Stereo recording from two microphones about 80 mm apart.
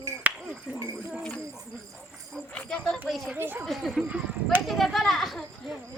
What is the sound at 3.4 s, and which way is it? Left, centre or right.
Speech, right.